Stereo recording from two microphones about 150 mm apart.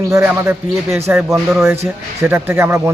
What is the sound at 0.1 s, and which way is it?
A man's voice, 20° right (ahead or behind).